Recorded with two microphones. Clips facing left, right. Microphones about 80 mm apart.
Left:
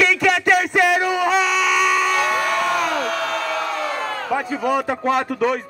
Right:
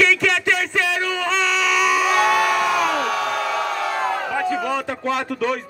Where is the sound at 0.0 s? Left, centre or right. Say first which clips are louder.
Left 1 dB; centre.